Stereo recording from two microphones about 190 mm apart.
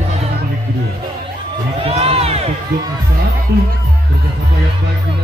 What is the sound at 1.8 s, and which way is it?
Crowd, 30° right (ahead or behind).